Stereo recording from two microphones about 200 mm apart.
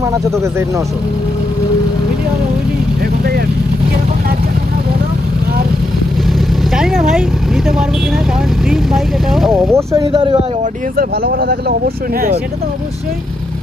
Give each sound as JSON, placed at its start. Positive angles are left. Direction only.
{"t": 6.7, "sound": "speech", "side_deg": 0}
{"t": 9.7, "sound": "speech", "side_deg": -15}
{"t": 10.1, "sound": "speech", "side_deg": -25}
{"t": 10.9, "sound": "speech", "side_deg": -50}